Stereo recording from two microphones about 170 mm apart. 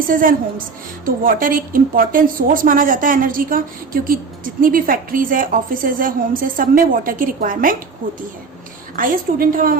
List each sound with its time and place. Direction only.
0.1 s a woman's voice: 55° right (ahead or behind)